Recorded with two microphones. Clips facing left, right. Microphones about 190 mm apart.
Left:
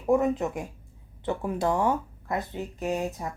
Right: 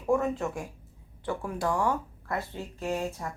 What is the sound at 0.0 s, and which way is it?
A woman's voice, 20° left (ahead or behind).